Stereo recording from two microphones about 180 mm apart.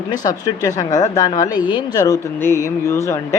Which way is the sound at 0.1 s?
20° left (ahead or behind).